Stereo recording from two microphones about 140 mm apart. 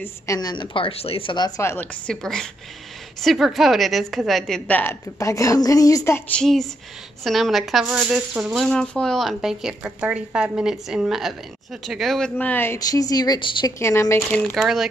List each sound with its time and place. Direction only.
0.0 s a woman's voice: 25° left (ahead or behind)
1.6 s a woman's voice: 15° left (ahead or behind)
5.2 s speech: 20° left (ahead or behind)
6.3 s speech: centre (ahead or behind)
8.6 s speech: 5° left (ahead or behind)
12.7 s speech: 25° left (ahead or behind)
13.7 s speech: 20° left (ahead or behind)
14.3 s speech: 5° left (ahead or behind)